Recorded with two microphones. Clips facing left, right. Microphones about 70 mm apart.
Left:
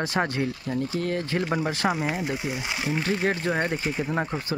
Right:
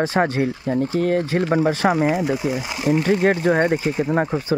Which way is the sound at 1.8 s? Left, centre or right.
Right.